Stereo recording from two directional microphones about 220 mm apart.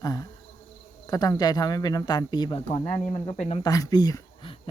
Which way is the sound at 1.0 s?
15° left (ahead or behind).